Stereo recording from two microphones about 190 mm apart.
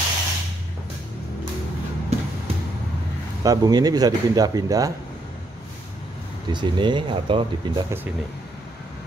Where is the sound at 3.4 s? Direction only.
20° right (ahead or behind).